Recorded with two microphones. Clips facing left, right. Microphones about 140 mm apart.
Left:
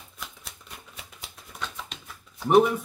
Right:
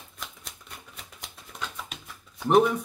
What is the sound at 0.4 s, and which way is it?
Typewriter, 5° left (ahead or behind).